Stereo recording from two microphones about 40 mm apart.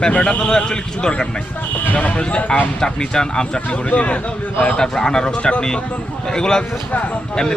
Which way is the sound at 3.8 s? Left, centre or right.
Left.